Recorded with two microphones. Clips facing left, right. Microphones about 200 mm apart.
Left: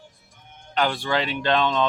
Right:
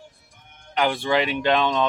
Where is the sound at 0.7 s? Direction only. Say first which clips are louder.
Right 2 dB; 15° right (ahead or behind).